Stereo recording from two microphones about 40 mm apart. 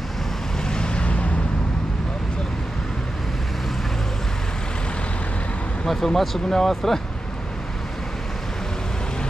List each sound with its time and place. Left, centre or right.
0.7 s vehicle: left
5.9 s speech: centre